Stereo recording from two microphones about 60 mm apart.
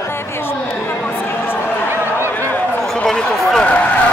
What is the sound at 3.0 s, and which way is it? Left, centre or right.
Run, centre.